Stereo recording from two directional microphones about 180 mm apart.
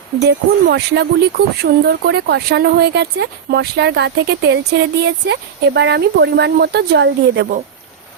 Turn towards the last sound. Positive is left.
turn(degrees=-65)  # may be behind; listen again after turning